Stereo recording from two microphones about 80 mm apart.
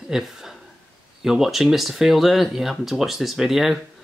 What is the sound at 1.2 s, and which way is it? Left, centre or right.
Speech, centre.